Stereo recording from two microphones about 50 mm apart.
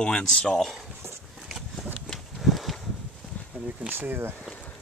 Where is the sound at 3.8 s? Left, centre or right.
Right.